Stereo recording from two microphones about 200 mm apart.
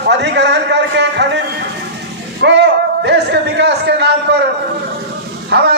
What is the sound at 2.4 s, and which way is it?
A man's voice, 60° right (ahead or behind).